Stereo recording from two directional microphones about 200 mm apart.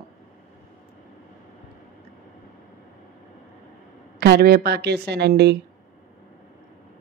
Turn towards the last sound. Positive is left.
turn(degrees=-55)  # may be behind; listen again after turning